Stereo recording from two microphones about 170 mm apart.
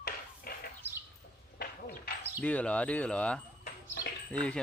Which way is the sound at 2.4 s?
10° left (ahead or behind).